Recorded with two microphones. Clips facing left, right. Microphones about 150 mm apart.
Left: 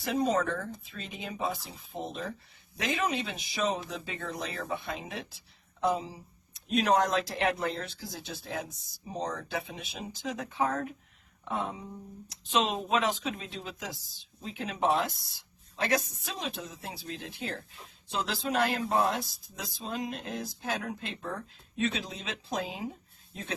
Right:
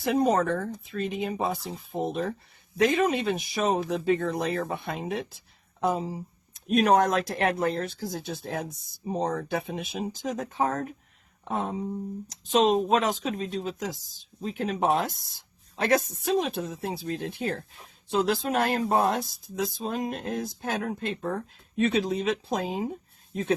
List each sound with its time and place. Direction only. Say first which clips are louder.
0.0 s speech: right 5 dB; 55° right (ahead or behind)